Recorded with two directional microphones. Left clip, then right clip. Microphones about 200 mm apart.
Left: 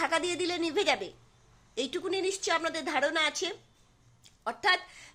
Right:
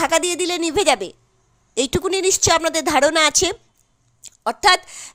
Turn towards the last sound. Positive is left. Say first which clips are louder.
# right 12 dB
turn(degrees=-50)  # may be behind; listen again after turning